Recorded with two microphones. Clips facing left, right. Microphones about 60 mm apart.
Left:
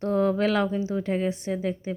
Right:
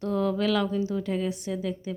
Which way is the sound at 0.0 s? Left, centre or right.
Left.